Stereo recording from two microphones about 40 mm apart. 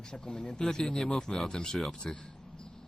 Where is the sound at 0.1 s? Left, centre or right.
Centre.